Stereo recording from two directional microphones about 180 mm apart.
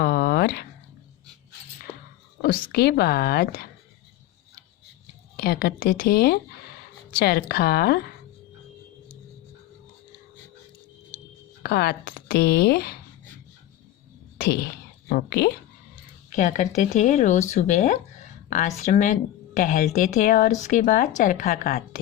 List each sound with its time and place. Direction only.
0.0 s a sound: 60° left (ahead or behind)
2.4 s speech: 60° left (ahead or behind)
5.4 s speech: 60° left (ahead or behind)
11.6 s speech: 65° left (ahead or behind)
14.3 s speech: 60° left (ahead or behind)
16.3 s speech: 45° left (ahead or behind)